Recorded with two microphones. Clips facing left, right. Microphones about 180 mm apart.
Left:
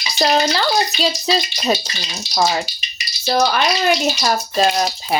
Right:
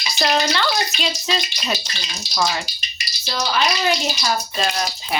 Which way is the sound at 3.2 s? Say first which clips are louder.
Left 5 dB; 55° left (ahead or behind).